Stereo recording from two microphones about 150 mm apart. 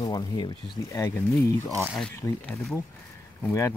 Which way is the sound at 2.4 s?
Centre (ahead or behind).